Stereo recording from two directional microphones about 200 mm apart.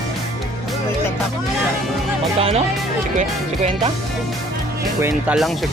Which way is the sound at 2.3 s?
30° right (ahead or behind).